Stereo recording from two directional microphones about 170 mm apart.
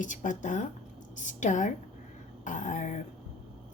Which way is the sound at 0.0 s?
50° left (ahead or behind).